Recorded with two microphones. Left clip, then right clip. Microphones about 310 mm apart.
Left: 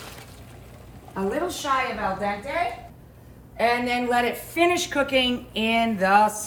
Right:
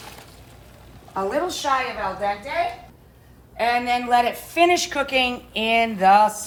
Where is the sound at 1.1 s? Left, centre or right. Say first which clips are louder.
Right 3 dB; right.